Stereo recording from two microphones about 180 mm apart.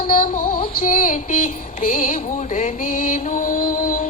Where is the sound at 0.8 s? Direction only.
50° left (ahead or behind).